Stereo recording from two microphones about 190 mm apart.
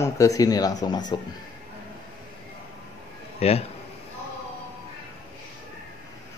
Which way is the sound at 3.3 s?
35° left (ahead or behind).